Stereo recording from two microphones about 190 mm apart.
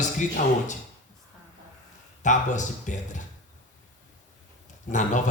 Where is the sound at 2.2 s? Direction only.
40° left (ahead or behind).